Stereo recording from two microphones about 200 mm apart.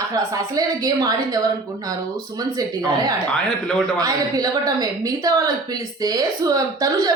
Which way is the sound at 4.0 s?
20° right (ahead or behind).